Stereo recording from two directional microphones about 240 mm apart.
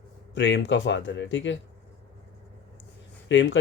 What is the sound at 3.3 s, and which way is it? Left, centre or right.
Speech, left.